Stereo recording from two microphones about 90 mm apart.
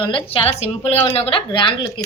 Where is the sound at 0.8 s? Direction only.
80° left.